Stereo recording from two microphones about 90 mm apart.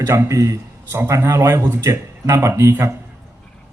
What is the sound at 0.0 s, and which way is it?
A man's voice, 30° right (ahead or behind).